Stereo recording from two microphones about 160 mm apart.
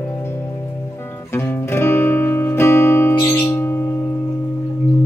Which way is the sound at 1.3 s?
15° left (ahead or behind).